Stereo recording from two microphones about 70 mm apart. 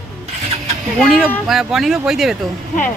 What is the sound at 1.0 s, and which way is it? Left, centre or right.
Speech, centre.